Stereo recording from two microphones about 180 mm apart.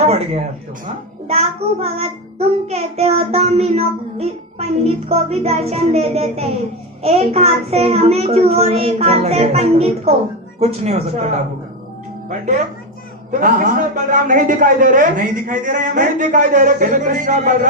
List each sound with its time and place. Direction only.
0.0 s a child's voice: 35° right (ahead or behind)
13.4 s a man's voice: 45° right (ahead or behind)